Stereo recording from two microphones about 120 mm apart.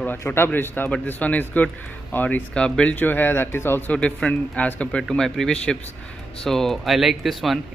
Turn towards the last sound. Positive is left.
turn(degrees=0)  # may be behind; listen again after turning